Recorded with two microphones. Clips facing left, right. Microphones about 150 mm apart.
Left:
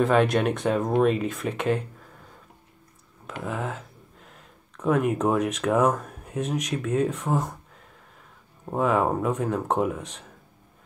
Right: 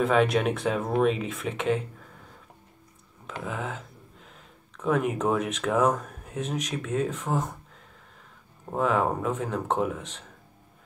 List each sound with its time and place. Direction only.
0.0 s speech: centre (ahead or behind)
3.3 s speech: 5° left (ahead or behind)
8.7 s speech: 5° left (ahead or behind)